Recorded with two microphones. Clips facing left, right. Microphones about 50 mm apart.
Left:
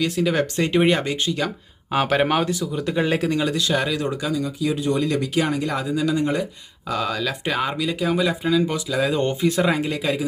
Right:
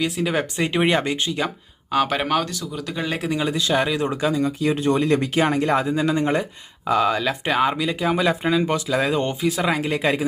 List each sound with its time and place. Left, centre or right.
0.0 s speech: centre
1.9 s speech: centre
3.2 s speech: centre; by 6.4 s right
6.8 s speech: right
8.3 s speech: right
8.9 s speech: right
9.4 s speech: centre
10.0 s speech: right